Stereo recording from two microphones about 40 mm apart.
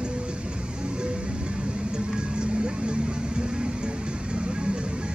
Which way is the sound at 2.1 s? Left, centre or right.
Right.